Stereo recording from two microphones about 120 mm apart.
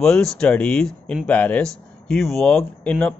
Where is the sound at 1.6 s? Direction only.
Centre (ahead or behind).